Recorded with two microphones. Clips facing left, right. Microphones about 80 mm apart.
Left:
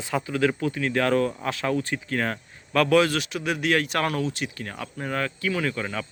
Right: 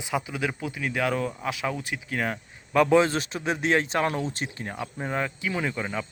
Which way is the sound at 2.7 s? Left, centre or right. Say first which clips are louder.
Even; right.